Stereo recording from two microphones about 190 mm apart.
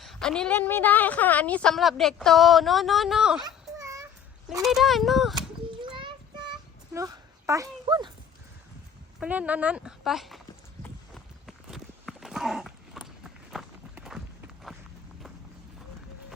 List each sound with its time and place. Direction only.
0.0 s a woman's voice: centre (ahead or behind)
3.4 s baby cry: 15° right (ahead or behind)
4.6 s a woman's voice: centre (ahead or behind)
5.8 s a sound: 25° right (ahead or behind)
9.2 s a woman's voice: 5° right (ahead or behind)
10.8 s horse: centre (ahead or behind)